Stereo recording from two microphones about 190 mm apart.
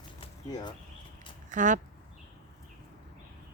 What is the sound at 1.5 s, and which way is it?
Speech, 40° right (ahead or behind).